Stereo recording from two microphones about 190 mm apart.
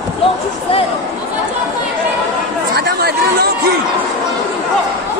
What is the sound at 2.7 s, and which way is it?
Speech, 55° right (ahead or behind).